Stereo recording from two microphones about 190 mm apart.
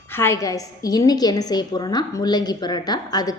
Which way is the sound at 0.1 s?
15° left (ahead or behind).